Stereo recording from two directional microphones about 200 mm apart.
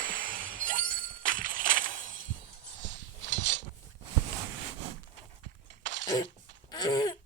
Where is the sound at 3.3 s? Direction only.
65° right (ahead or behind).